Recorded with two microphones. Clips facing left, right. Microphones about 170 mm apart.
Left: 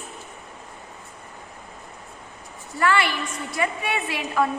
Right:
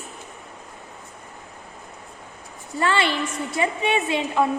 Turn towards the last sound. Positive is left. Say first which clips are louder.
# right 3 dB
turn(degrees=-25)  # may be behind; listen again after turning